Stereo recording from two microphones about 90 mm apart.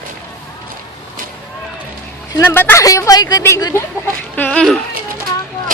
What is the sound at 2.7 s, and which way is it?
Speech, 35° left (ahead or behind).